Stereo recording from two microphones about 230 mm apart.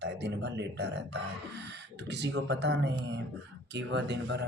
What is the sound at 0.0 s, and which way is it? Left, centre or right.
A man's voice, right.